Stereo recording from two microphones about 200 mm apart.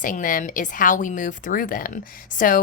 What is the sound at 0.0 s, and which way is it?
A woman's voice, 40° left (ahead or behind).